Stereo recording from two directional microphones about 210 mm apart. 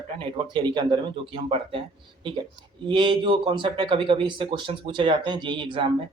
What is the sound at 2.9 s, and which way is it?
Speech, 25° right (ahead or behind).